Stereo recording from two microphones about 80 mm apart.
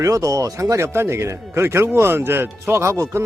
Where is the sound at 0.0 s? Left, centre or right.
Right.